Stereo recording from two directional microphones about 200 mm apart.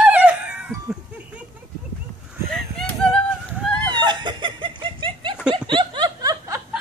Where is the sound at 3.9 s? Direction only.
20° right (ahead or behind).